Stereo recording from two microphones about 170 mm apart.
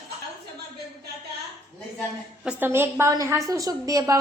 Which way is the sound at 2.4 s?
10° right (ahead or behind).